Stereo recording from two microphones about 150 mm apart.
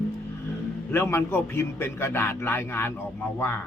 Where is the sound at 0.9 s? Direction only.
15° left (ahead or behind).